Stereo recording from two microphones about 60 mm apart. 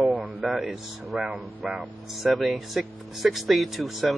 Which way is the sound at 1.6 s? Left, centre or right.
Centre.